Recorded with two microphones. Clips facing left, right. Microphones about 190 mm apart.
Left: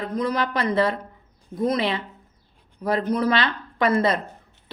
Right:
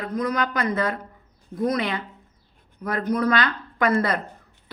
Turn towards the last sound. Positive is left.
turn(degrees=25)  # may be behind; listen again after turning